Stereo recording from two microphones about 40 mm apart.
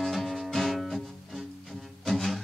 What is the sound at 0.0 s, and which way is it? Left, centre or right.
Music, centre.